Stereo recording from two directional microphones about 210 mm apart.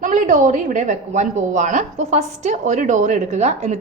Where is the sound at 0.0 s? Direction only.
35° right (ahead or behind).